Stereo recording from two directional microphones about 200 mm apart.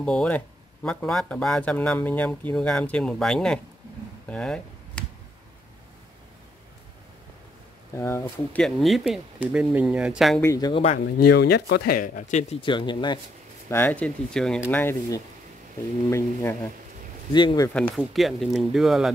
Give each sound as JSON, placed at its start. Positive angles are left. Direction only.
{"t": 0.0, "sound": "speech", "side_deg": 5}
{"t": 4.3, "sound": "a sound", "side_deg": 5}
{"t": 7.9, "sound": "speech", "side_deg": 15}
{"t": 8.6, "sound": "speech", "side_deg": 0}
{"t": 10.4, "sound": "speech", "side_deg": 20}
{"t": 11.1, "sound": "speech", "side_deg": 50}
{"t": 12.6, "sound": "speech", "side_deg": 25}
{"t": 13.7, "sound": "speech", "side_deg": 10}
{"t": 17.7, "sound": "speech", "side_deg": 5}